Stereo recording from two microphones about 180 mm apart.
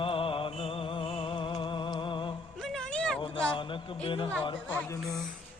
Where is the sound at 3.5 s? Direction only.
30° left (ahead or behind).